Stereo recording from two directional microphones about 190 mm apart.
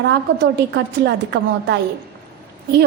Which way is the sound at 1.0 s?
65° right (ahead or behind).